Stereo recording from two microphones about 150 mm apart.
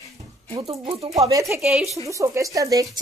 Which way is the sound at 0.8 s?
35° right (ahead or behind).